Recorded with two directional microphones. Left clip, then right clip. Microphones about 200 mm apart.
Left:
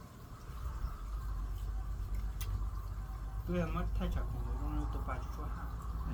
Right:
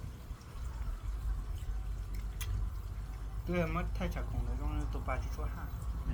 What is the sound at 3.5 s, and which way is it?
Speech, 25° right (ahead or behind).